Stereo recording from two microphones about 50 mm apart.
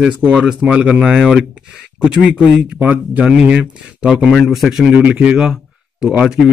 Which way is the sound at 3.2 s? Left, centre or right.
Centre.